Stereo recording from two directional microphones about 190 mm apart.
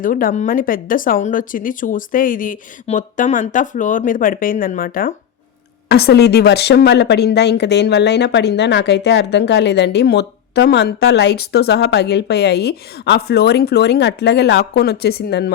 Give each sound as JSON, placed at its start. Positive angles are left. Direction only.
{"t": 0.0, "sound": "speech", "side_deg": 45}
{"t": 5.9, "sound": "speech", "side_deg": 60}